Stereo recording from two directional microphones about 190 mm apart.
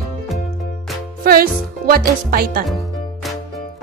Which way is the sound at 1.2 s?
50° right (ahead or behind).